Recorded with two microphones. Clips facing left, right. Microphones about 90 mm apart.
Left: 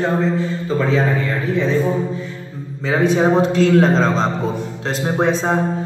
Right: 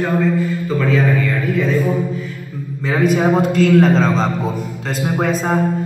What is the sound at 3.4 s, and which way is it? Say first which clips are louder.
Speech: even; 5° right (ahead or behind).